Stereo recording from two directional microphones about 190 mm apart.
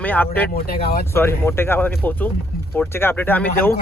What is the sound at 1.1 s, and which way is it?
Speech, 15° left (ahead or behind).